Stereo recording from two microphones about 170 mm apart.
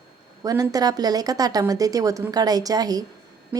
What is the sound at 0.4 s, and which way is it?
Speech, 20° right (ahead or behind).